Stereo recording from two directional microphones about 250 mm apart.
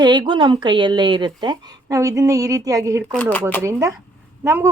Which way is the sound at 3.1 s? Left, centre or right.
Centre.